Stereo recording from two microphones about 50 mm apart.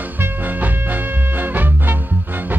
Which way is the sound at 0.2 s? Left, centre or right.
Right.